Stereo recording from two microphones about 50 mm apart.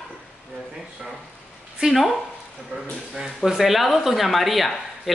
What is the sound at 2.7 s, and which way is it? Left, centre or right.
Speech, right.